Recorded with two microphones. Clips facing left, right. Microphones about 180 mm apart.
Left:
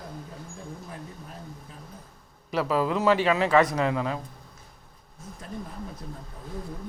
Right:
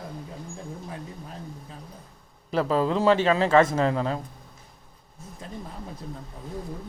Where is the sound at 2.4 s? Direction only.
30° right (ahead or behind).